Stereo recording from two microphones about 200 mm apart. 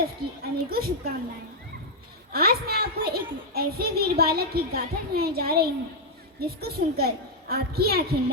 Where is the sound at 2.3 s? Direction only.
50° right (ahead or behind).